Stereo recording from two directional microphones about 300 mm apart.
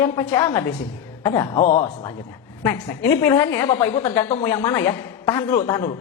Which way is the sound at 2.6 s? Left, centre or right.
Centre.